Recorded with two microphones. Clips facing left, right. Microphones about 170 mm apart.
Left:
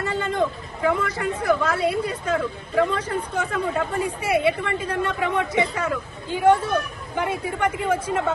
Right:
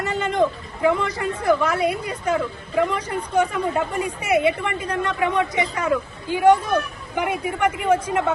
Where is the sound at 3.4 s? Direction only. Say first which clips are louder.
Right 6 dB; 20° right (ahead or behind).